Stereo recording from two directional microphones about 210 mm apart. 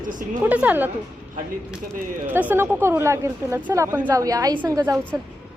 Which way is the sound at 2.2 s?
10° right (ahead or behind).